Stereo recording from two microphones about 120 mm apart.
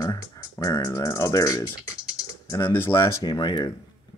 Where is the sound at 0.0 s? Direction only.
30° left (ahead or behind).